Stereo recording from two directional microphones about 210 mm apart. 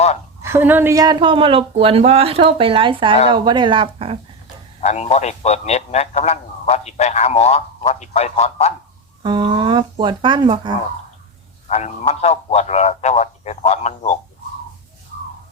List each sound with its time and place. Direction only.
0.4 s speech: 10° right (ahead or behind); by 4.2 s 25° right (ahead or behind)
4.9 s a man's voice: 30° left (ahead or behind)
9.2 s speech: 25° right (ahead or behind)
11.7 s a man's voice: 30° left (ahead or behind)